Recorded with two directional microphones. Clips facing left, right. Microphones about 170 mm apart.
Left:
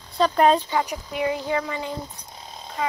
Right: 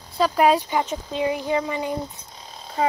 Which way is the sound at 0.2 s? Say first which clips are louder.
Even; 5° right (ahead or behind).